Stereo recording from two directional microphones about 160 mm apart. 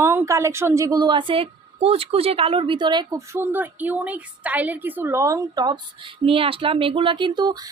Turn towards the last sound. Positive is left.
turn(degrees=-25)  # may be behind; listen again after turning